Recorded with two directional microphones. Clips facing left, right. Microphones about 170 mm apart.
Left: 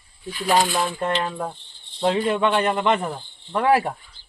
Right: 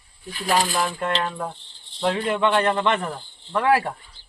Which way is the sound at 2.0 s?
20° left (ahead or behind).